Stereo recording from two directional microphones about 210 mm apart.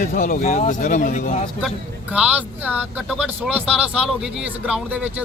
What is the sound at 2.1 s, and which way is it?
Speech, 5° right (ahead or behind).